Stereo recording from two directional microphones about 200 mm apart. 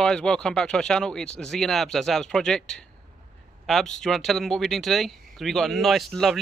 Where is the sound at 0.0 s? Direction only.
5° left (ahead or behind).